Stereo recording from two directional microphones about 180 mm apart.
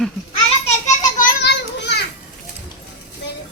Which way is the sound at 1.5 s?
70° left (ahead or behind).